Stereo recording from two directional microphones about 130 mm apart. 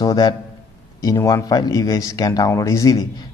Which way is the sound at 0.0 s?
30° left (ahead or behind).